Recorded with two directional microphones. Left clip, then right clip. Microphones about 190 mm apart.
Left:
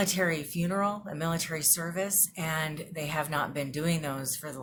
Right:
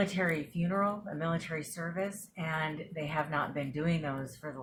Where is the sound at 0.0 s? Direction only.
15° left (ahead or behind).